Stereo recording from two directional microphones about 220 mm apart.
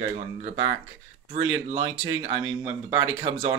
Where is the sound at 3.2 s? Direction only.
25° right (ahead or behind).